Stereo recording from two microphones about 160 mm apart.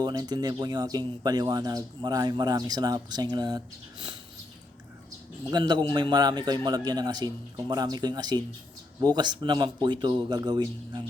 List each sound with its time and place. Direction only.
0.0 s speech: 25° right (ahead or behind)
5.5 s speech: 25° right (ahead or behind)